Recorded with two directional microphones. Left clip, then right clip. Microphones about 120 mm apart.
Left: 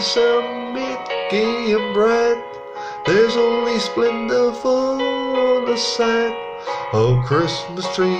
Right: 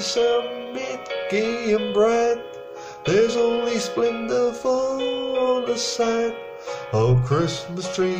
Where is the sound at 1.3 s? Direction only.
5° right (ahead or behind).